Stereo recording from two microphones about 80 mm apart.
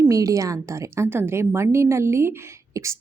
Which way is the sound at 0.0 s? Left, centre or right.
Right.